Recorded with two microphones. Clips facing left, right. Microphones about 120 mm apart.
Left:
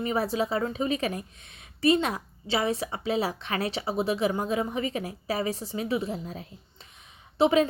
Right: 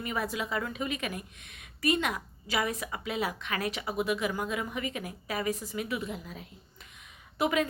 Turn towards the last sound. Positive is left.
turn(degrees=30)  # may be behind; listen again after turning